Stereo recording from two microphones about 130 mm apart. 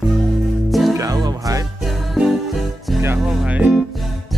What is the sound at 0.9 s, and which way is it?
Music, 30° right (ahead or behind).